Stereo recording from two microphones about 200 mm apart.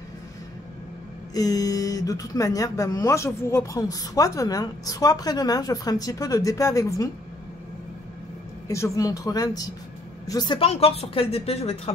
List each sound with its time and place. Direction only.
1.3 s speech: 20° left (ahead or behind)
8.6 s a woman's voice: 15° left (ahead or behind)